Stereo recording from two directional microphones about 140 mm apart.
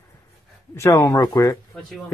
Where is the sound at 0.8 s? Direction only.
25° left (ahead or behind).